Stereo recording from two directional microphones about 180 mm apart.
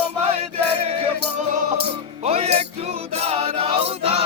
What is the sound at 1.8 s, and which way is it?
Music, 35° right (ahead or behind).